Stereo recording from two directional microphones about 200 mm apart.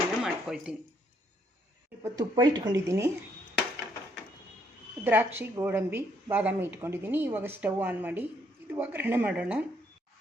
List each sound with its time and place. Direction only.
0.2 s a sound: 5° right (ahead or behind)
2.0 s a woman's voice: 20° right (ahead or behind)
5.0 s a woman's voice: 10° right (ahead or behind)